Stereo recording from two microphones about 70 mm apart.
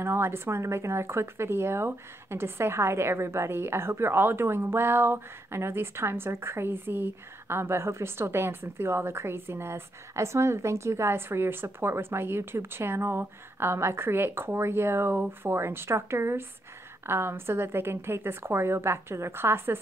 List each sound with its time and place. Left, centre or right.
0.0 s speech: right